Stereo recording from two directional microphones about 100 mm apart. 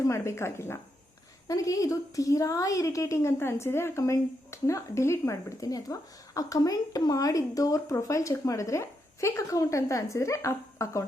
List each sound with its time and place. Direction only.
0.0 s a woman's voice: 30° left (ahead or behind)